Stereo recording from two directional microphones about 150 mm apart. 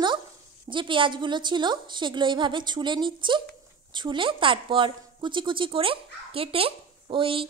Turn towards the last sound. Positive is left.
turn(degrees=-35)  # may be behind; listen again after turning